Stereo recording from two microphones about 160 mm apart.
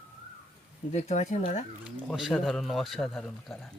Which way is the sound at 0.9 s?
45° left (ahead or behind).